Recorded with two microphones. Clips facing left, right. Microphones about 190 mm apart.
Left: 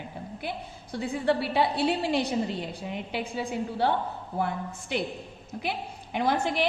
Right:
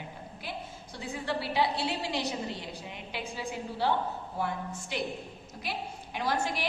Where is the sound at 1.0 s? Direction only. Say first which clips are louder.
Left 8 dB; 60° left (ahead or behind).